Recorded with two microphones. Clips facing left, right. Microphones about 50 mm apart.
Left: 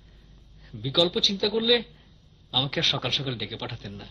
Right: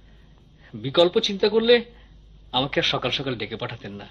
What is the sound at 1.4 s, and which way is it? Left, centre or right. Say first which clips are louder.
Speech: right 7 dB; centre.